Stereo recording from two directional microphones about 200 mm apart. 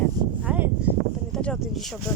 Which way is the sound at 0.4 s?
5° right (ahead or behind).